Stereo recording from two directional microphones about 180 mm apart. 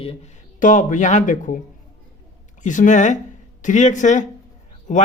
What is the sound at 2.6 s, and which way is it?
A man's voice, 45° left (ahead or behind).